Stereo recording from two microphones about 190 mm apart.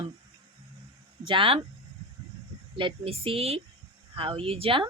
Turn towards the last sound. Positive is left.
turn(degrees=-30)  # may be behind; listen again after turning